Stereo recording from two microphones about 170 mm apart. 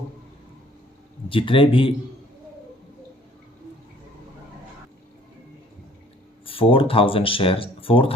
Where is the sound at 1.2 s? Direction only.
30° left (ahead or behind).